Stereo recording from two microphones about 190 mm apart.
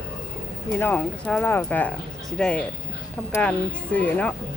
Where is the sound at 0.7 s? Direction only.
10° left (ahead or behind).